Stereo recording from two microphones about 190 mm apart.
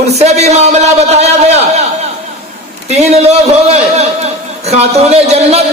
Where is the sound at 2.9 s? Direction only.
35° right (ahead or behind).